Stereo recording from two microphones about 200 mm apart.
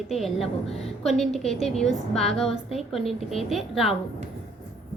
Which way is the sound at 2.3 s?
30° left (ahead or behind).